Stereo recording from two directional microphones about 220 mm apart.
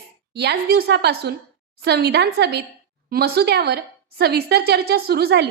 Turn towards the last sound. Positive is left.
turn(degrees=-45)  # may be behind; listen again after turning